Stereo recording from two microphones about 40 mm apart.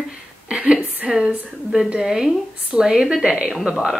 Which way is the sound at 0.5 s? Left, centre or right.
Right.